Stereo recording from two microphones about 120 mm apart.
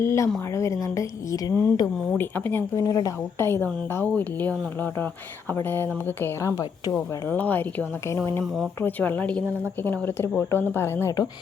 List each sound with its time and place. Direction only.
0.0 s a woman's voice: 25° left (ahead or behind)
2.1 s a woman's voice: 15° left (ahead or behind)
2.7 s a woman's voice: 25° left (ahead or behind)